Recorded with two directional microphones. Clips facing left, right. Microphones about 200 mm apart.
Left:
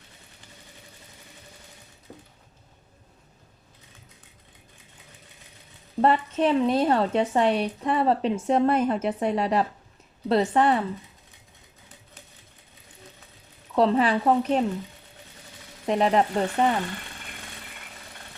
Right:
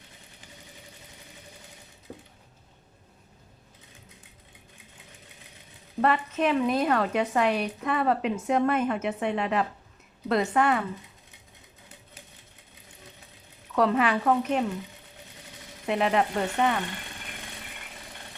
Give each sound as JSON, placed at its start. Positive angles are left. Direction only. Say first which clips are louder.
{"t": 6.0, "sound": "a woman's voice", "louder": "left 3 dB", "side_deg": 30}
{"t": 13.7, "sound": "a woman's voice", "louder": "left 3 dB", "side_deg": 30}
{"t": 15.9, "sound": "a woman's voice", "louder": "left 3 dB", "side_deg": 35}